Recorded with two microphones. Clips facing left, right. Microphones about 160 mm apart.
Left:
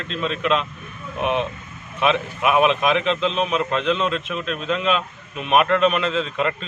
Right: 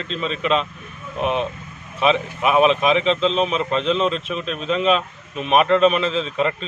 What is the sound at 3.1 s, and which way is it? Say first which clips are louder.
Speech: right 3 dB; 30° right (ahead or behind).